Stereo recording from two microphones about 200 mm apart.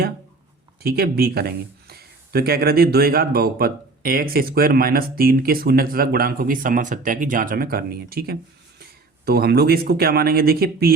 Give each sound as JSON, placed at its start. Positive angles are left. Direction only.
{"t": 0.8, "sound": "speech", "side_deg": -50}